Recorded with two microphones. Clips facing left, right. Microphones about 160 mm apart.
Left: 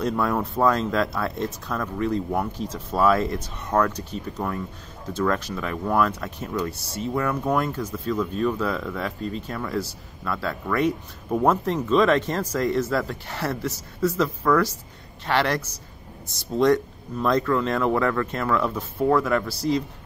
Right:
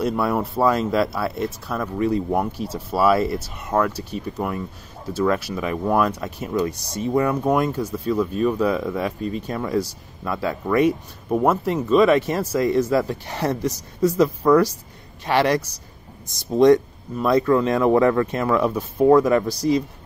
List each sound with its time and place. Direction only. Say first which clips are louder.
0.0 s speech: right 2 dB; 10° right (ahead or behind)